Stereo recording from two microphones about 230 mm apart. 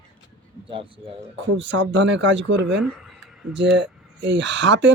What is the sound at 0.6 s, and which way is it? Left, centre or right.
Speech, right.